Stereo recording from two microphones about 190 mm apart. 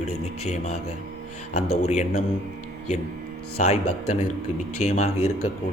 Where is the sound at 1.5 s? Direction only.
35° left (ahead or behind).